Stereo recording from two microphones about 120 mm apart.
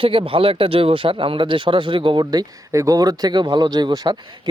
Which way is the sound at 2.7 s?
30° right (ahead or behind).